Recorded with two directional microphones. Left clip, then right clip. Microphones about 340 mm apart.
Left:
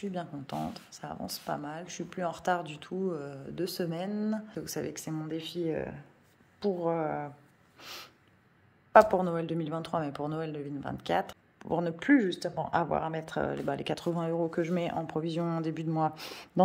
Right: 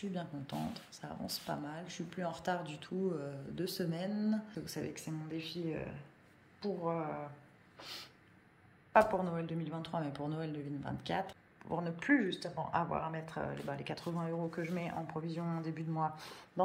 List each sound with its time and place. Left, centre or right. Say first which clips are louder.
0.0 s speech: left 6 dB; centre
7.8 s a sound: left 3 dB; centre
8.9 s speech: left 8 dB; centre
11.6 s speech: left 7 dB; left
14.0 s speech: left 8 dB; left